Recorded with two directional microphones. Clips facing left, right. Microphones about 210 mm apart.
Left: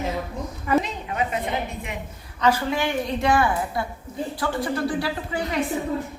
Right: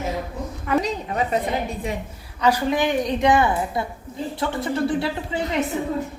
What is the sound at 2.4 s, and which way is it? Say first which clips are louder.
A woman's voice: right 2 dB; 15° right (ahead or behind).